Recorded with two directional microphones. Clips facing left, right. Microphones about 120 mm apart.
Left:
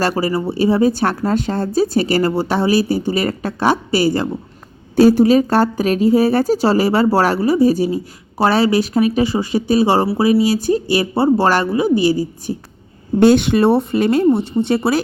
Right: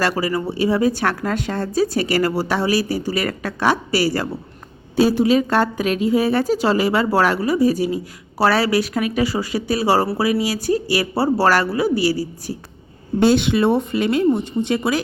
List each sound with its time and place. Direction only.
0.0 s speech: 30° left (ahead or behind)
4.9 s a woman's voice: 40° left (ahead or behind); by 12.5 s 20° left (ahead or behind)
13.1 s a woman's voice: 50° left (ahead or behind); by 15.0 s 35° left (ahead or behind)